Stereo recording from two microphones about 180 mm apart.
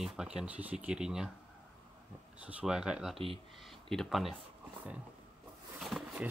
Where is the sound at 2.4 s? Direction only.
5° right (ahead or behind).